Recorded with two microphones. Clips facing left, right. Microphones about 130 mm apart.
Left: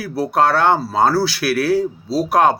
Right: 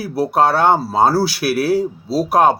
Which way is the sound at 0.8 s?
30° right (ahead or behind).